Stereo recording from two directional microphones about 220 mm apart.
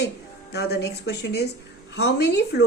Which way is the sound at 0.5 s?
50° left (ahead or behind).